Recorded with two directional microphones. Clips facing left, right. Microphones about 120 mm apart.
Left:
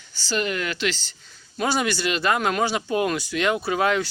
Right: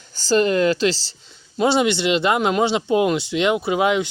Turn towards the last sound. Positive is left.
turn(degrees=-15)  # may be behind; listen again after turning